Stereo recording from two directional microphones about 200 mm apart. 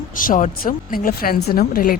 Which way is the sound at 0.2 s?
40° left (ahead or behind).